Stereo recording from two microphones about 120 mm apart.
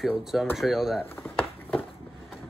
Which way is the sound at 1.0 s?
20° left (ahead or behind).